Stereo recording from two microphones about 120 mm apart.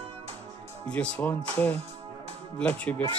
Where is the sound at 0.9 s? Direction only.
10° left (ahead or behind).